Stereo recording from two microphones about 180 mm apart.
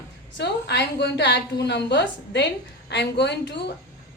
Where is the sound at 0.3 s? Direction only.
70° left (ahead or behind).